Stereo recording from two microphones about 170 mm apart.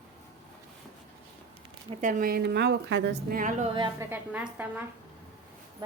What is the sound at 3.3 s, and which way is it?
Speech, 50° right (ahead or behind).